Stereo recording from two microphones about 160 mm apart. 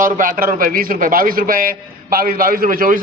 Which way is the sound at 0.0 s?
60° right (ahead or behind).